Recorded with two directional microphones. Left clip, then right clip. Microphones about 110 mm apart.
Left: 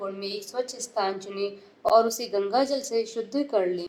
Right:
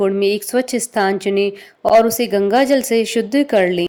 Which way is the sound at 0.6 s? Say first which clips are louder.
Right 11 dB; 65° right (ahead or behind).